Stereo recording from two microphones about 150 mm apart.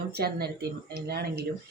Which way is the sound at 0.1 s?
90° right.